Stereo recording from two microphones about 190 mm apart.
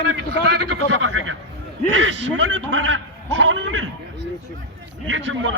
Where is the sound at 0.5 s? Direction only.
90° right.